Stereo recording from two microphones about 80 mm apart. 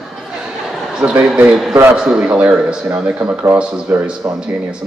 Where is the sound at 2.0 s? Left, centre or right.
Centre.